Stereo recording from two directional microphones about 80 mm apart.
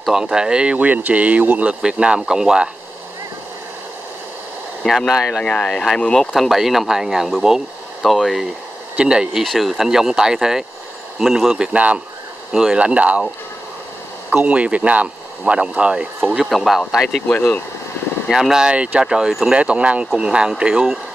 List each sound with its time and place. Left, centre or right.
0.0 s speech: centre
4.8 s speech: centre
5.4 s speech: centre
9.4 s speech: centre
14.3 s speech: centre
16.4 s speech: centre
17.3 s speech: centre
18.3 s speech: centre